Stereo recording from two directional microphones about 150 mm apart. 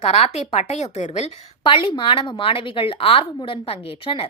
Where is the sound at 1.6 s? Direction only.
35° left (ahead or behind).